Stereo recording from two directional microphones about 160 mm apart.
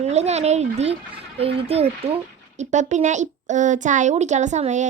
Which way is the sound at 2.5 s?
50° right (ahead or behind).